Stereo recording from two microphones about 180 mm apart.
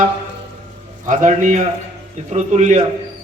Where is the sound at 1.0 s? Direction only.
45° right (ahead or behind).